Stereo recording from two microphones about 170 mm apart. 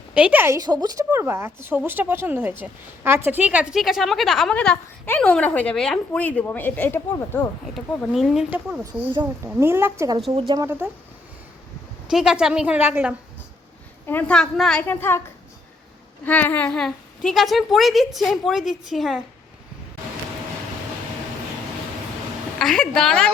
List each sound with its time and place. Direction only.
0.1 s a woman's voice: 5° right (ahead or behind); by 7.4 s 15° left (ahead or behind)
8.1 s a woman's voice: centre (ahead or behind)
10.3 s speech: 30° right (ahead or behind)
10.6 s a woman's voice: 10° right (ahead or behind)
12.1 s a woman's voice: 5° right (ahead or behind)
14.1 s a woman's voice: 10° left (ahead or behind)
16.2 s a woman's voice: 10° left (ahead or behind)
22.5 s a woman's voice: 5° left (ahead or behind)